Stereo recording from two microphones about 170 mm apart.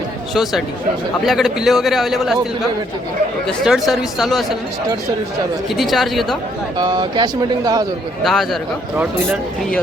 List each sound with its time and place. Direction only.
1.2 s a man's voice: centre (ahead or behind)
3.4 s a man's voice: centre (ahead or behind)
5.6 s a man's voice: centre (ahead or behind)
6.7 s speech: 25° right (ahead or behind)
8.2 s a man's voice: centre (ahead or behind)